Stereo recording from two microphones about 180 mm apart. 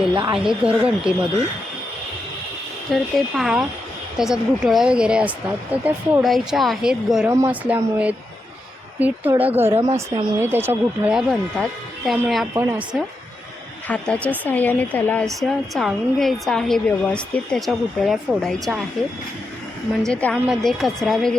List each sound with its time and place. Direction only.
0.1 s speech: 25° right (ahead or behind)
0.3 s a woman's voice: centre (ahead or behind)
2.9 s a woman's voice: centre (ahead or behind)
7.3 s speech: 15° right (ahead or behind)
12.5 s speech: 10° right (ahead or behind)
13.8 s a woman's voice: 5° left (ahead or behind)
20.1 s a woman's voice: centre (ahead or behind)